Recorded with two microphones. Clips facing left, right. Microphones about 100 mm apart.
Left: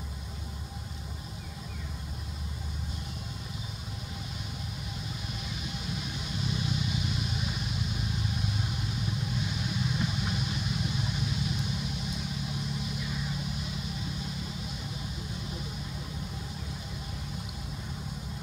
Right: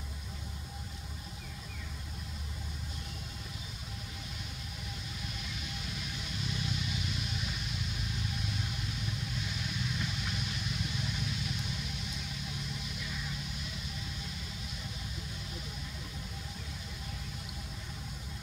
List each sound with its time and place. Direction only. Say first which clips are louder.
5.8 s vehicle: left 5 dB; 20° left (ahead or behind)
13.0 s vehicle: left 5 dB; 20° left (ahead or behind)